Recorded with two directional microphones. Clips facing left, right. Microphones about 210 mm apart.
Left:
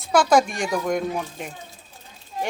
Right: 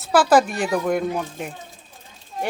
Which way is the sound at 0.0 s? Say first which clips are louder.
Right 2 dB; 5° right (ahead or behind).